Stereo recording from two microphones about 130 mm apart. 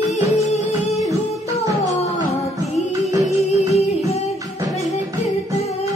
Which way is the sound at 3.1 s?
25° right (ahead or behind).